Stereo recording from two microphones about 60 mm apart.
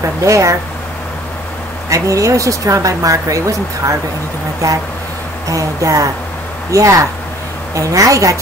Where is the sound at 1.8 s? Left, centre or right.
Right.